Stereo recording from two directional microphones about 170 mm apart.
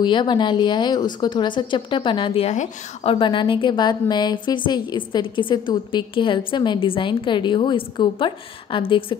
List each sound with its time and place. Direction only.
0.0 s a woman's voice: 25° left (ahead or behind)